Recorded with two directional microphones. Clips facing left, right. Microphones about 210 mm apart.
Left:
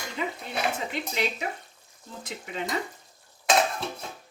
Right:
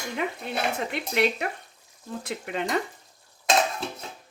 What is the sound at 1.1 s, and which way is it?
Speech, 60° right (ahead or behind).